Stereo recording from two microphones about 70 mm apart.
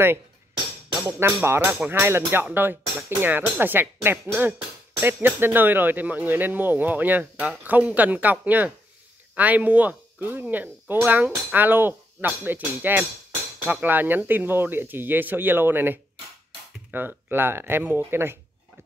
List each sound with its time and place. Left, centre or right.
1.0 s speech: right